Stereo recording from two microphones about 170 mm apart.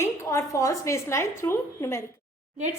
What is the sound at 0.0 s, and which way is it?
A woman's voice, 15° left (ahead or behind).